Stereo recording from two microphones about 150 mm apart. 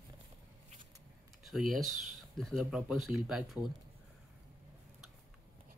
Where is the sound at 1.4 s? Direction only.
Centre (ahead or behind).